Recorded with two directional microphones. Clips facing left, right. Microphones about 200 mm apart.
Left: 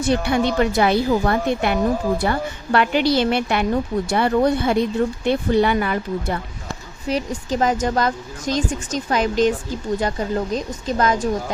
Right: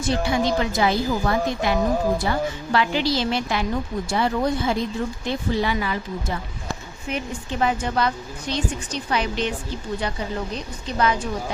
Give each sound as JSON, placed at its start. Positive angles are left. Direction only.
{"t": 0.0, "sound": "a woman's voice", "side_deg": 60}
{"t": 7.1, "sound": "a woman's voice", "side_deg": 35}